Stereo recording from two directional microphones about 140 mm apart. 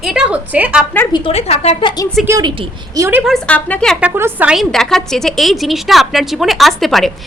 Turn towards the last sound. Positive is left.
turn(degrees=0)  # may be behind; listen again after turning